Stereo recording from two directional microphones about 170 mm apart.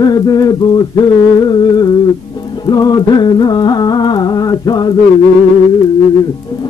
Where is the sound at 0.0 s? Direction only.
25° left (ahead or behind).